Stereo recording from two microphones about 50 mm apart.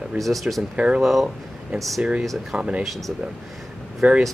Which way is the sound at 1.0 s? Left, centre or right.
Centre.